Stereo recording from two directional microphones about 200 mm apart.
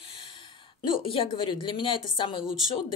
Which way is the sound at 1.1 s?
25° left (ahead or behind).